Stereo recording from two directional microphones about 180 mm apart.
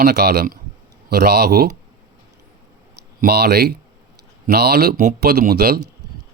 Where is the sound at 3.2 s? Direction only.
65° right (ahead or behind).